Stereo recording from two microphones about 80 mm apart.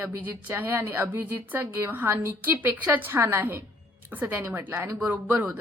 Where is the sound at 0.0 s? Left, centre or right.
Right.